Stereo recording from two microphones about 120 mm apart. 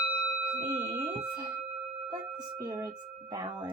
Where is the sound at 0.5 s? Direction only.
30° right (ahead or behind).